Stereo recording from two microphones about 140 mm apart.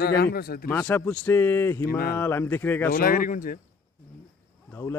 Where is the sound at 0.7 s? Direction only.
10° left (ahead or behind).